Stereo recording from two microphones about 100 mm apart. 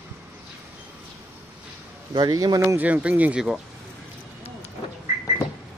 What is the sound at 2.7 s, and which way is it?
Speech, 15° right (ahead or behind).